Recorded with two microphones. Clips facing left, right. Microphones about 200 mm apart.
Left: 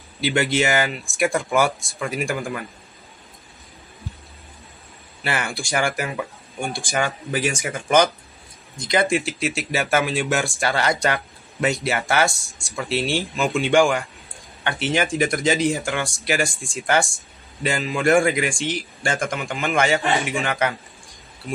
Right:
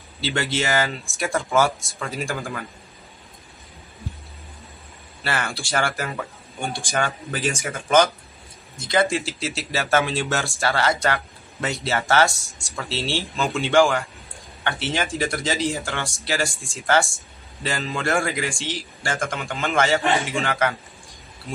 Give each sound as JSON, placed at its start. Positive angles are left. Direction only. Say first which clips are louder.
{"t": 0.2, "sound": "speech", "louder": "left 4 dB", "side_deg": 15}
{"t": 5.2, "sound": "speech", "louder": "left 1 dB", "side_deg": 15}